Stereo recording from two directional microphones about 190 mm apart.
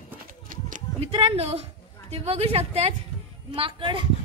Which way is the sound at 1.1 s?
30° right (ahead or behind).